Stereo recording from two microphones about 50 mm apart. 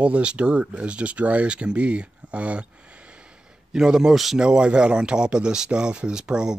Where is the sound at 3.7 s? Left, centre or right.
Centre.